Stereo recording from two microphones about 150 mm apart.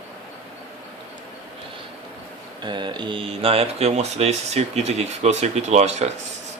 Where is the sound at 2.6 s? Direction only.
30° right (ahead or behind).